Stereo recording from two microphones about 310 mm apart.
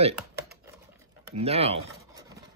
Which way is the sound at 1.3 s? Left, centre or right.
Centre.